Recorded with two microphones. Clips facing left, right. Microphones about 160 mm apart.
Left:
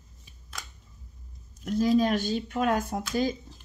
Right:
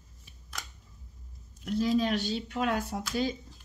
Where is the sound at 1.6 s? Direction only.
45° left (ahead or behind).